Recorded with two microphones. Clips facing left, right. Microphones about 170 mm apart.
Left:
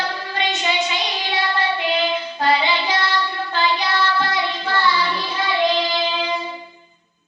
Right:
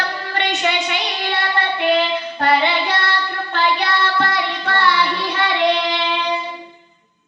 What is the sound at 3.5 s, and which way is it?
Child singing, 60° right (ahead or behind).